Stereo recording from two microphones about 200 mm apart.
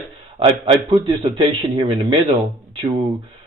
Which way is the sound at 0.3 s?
30° right (ahead or behind).